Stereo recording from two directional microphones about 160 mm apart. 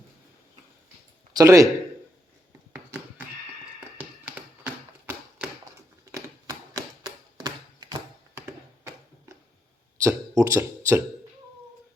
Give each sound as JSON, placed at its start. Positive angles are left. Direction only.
{"t": 1.4, "sound": "a man's voice", "side_deg": -20}
{"t": 3.8, "sound": "tap", "side_deg": -10}
{"t": 6.1, "sound": "a sound", "side_deg": -20}
{"t": 10.0, "sound": "speech", "side_deg": -20}